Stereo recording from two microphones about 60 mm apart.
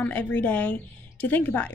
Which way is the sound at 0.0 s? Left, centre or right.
Left.